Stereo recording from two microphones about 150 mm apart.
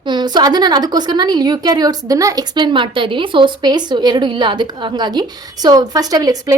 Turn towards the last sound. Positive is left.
turn(degrees=-25)  # may be behind; listen again after turning